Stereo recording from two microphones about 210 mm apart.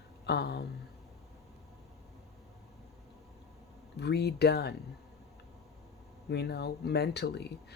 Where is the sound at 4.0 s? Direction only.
50° left (ahead or behind).